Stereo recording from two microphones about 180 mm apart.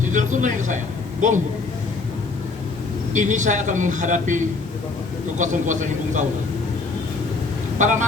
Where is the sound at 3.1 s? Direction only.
45° right (ahead or behind).